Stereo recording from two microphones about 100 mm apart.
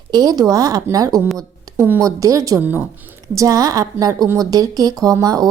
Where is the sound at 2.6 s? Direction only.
20° right (ahead or behind).